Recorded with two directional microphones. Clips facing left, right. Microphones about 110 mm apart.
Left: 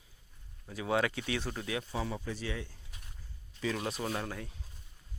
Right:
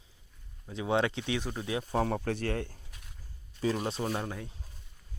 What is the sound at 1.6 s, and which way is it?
Speech, 30° right (ahead or behind).